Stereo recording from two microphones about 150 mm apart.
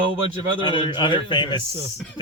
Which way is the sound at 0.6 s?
30° left (ahead or behind).